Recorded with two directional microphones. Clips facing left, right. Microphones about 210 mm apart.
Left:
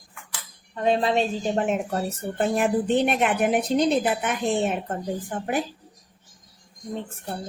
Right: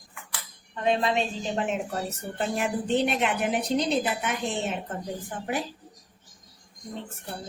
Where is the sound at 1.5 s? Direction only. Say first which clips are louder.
Left 2 dB; 45° left (ahead or behind).